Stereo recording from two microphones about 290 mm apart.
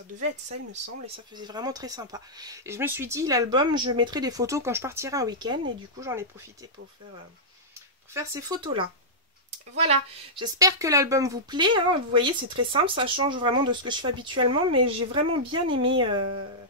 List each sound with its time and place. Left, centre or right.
1.0 s speech: centre
8.1 s speech: centre
16.2 s speech: right